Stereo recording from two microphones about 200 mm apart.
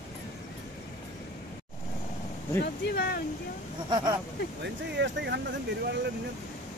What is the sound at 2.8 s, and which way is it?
Speech, 55° left (ahead or behind).